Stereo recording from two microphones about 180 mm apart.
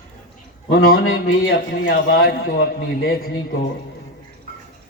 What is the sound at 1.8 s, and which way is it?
A man's voice, 60° left (ahead or behind).